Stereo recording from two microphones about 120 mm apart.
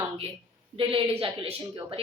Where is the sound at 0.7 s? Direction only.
50° right (ahead or behind).